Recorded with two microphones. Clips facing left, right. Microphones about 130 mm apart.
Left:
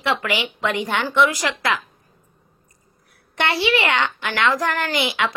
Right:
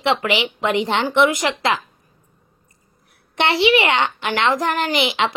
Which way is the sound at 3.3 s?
25° right (ahead or behind).